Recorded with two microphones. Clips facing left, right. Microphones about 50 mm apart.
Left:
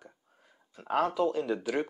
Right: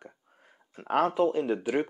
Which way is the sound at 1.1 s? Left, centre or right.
Right.